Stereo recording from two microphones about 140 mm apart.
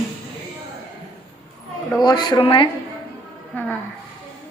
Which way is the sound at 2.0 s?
30° left (ahead or behind).